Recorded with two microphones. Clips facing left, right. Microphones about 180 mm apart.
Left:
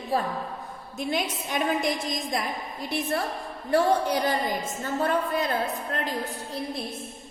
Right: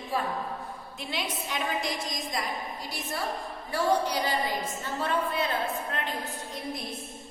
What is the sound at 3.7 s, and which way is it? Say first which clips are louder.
A woman's voice: left 4 dB; 50° left (ahead or behind).